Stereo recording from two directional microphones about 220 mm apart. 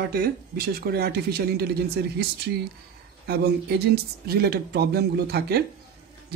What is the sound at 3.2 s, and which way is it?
Speech, 45° right (ahead or behind).